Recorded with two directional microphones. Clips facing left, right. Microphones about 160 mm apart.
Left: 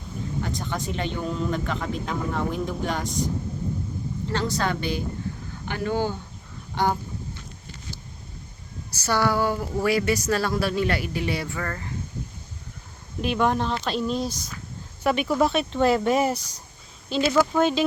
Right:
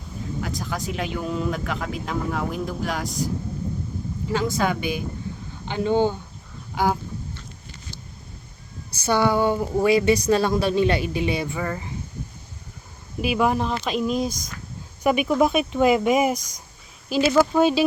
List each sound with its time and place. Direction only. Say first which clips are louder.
0.4 s speech: right 2 dB; 5° right (ahead or behind)
4.5 s a woman's voice: right 2 dB; 10° right (ahead or behind)
6.8 s speech: right 1 dB; 5° right (ahead or behind)
9.0 s a woman's voice: right 3 dB; 20° right (ahead or behind)
13.2 s speech: right 1 dB; 5° right (ahead or behind)